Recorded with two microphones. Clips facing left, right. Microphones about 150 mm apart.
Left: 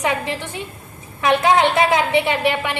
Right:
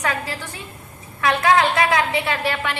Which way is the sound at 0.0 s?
20° left (ahead or behind).